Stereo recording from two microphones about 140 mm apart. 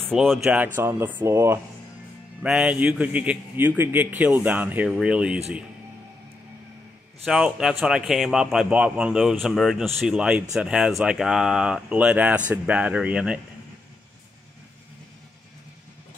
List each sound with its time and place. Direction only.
0.1 s speech: centre (ahead or behind)
0.7 s a man's voice: 15° right (ahead or behind)
2.4 s a man's voice: 5° right (ahead or behind)
7.2 s a man's voice: 5° right (ahead or behind)